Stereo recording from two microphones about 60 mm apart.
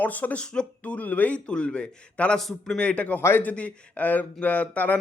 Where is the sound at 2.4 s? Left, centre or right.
Centre.